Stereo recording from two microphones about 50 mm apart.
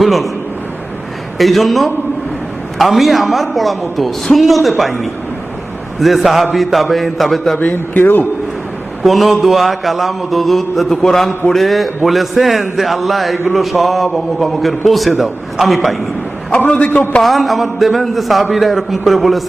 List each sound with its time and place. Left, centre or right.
0.0 s a man's voice: centre
1.4 s a woman's voice: centre
8.0 s a man's voice: left
9.0 s a woman's voice: centre
16.5 s a man's voice: left
17.2 s a woman's voice: centre